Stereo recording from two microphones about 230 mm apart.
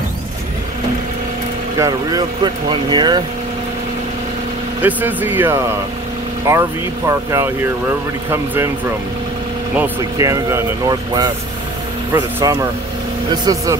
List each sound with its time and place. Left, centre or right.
1.8 s speech: centre
4.8 s speech: centre
9.8 s speech: centre